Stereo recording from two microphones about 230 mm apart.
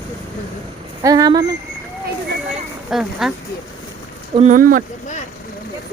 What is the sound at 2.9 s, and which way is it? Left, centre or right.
Speech, centre.